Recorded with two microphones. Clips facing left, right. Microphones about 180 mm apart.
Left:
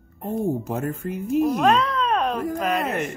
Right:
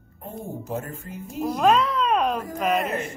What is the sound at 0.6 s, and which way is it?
Speech, 65° left (ahead or behind).